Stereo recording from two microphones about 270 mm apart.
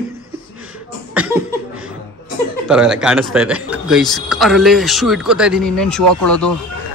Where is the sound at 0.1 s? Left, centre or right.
Centre.